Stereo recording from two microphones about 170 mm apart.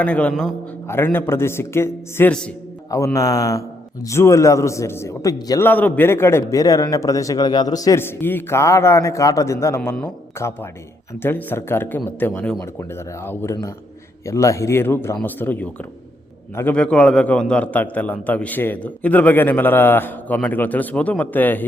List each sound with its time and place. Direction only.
0.0 s a man's voice: 10° left (ahead or behind)
2.9 s a man's voice: 20° left (ahead or behind)